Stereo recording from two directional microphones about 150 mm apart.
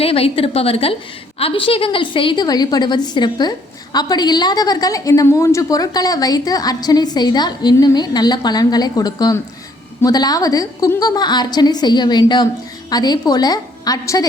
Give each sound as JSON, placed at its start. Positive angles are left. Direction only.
{"t": 0.0, "sound": "a woman's voice", "side_deg": 40}